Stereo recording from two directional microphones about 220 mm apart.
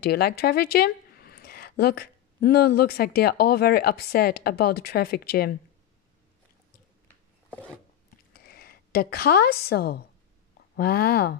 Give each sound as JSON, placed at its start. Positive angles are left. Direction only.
{"t": 0.0, "sound": "speech", "side_deg": 45}
{"t": 7.5, "sound": "a sound", "side_deg": 5}
{"t": 8.3, "sound": "a woman's voice", "side_deg": 45}